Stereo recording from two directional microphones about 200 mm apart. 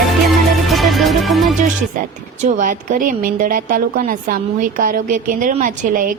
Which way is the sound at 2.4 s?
40° right (ahead or behind).